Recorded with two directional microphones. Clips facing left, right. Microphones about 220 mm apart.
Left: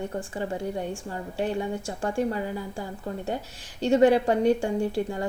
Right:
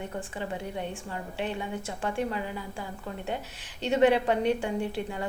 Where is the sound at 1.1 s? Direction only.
40° left (ahead or behind).